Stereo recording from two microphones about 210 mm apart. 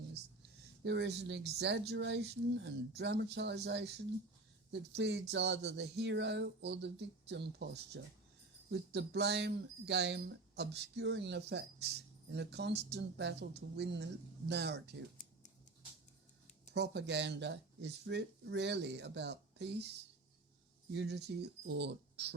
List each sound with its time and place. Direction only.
0.9 s speech: 55° right (ahead or behind)
16.7 s speech: 55° right (ahead or behind)
20.9 s speech: 55° right (ahead or behind)